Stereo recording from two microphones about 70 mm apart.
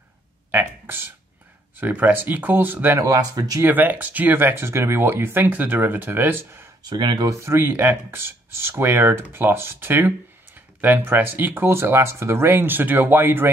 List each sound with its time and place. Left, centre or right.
0.5 s speech: right
3.0 s speech: right
3.6 s speech: right
6.8 s speech: right
7.2 s speech: right